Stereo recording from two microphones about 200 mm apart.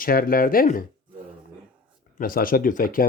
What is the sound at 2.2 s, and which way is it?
Speech, 45° left (ahead or behind).